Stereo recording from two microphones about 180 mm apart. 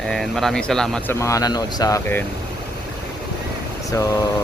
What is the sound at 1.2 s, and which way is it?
Speech, 20° left (ahead or behind).